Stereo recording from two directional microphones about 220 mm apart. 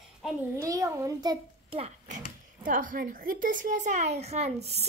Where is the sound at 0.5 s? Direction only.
15° right (ahead or behind); by 4.4 s 30° right (ahead or behind).